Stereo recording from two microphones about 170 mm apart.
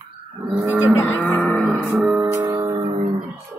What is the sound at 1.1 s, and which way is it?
Music, 10° left (ahead or behind).